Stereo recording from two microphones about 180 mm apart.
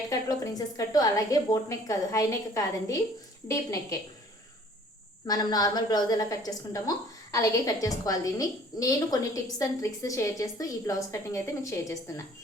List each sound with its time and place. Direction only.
0.1 s a woman's voice: 20° left (ahead or behind)
5.2 s a woman's voice: 20° left (ahead or behind)